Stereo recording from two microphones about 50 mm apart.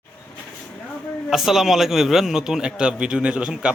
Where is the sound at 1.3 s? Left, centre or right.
Centre.